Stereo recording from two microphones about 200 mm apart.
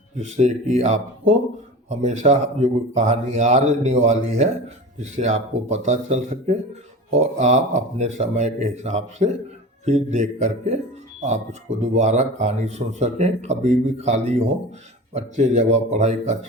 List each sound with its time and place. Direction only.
0.3 s speech: 35° right (ahead or behind)
11.8 s speech: 35° right (ahead or behind)